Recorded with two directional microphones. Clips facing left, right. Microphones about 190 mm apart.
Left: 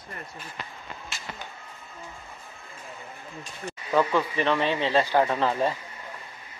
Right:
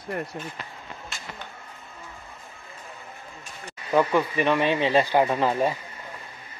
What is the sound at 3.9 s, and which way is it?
Speech, 15° right (ahead or behind).